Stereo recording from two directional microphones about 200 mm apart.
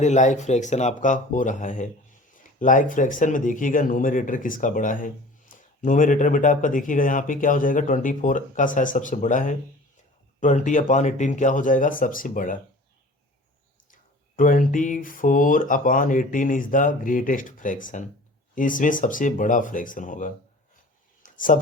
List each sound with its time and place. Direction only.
0.0 s speech: 35° left (ahead or behind)
13.9 s speech: 45° left (ahead or behind)
21.2 s a sound: 40° left (ahead or behind)